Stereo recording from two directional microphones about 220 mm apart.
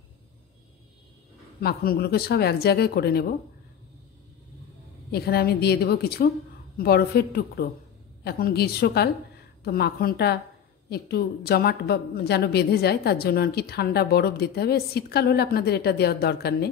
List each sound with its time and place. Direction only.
1.6 s speech: 45° left (ahead or behind)
5.1 s speech: 45° left (ahead or behind)